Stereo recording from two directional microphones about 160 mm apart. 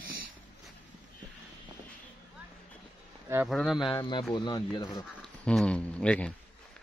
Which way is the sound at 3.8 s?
30° left (ahead or behind).